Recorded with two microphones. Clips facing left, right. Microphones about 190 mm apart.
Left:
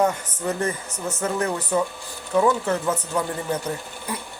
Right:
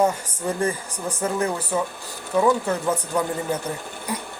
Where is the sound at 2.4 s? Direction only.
10° right (ahead or behind).